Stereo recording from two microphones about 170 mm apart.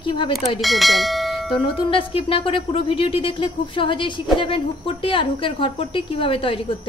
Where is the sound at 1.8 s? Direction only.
30° left (ahead or behind).